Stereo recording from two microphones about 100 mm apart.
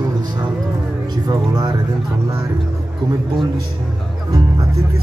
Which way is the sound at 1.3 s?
45° right (ahead or behind).